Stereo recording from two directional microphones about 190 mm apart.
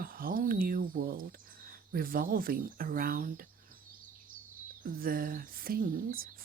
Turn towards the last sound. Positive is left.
turn(degrees=-50)  # may be behind; listen again after turning